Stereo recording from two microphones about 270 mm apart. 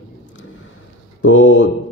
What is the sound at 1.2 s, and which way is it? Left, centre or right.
Speech, left.